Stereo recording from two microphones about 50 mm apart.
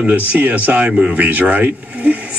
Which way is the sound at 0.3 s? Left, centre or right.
Right.